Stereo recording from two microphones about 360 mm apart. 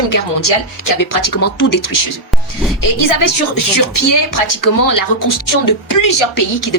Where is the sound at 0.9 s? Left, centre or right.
Left.